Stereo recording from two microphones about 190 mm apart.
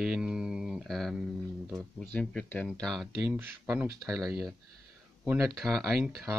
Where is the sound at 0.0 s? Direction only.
5° right (ahead or behind).